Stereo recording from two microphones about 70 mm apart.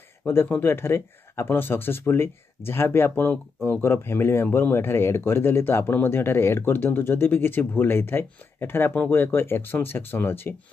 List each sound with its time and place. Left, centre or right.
0.2 s speech: left